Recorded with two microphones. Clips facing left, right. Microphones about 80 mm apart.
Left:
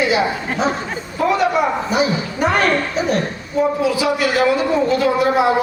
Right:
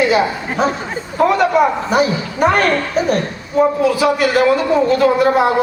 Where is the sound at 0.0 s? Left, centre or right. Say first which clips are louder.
Right 3 dB; right.